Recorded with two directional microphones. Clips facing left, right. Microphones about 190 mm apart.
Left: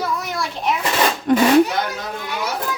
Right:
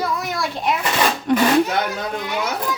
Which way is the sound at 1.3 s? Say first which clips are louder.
Left 2 dB; 45° left (ahead or behind).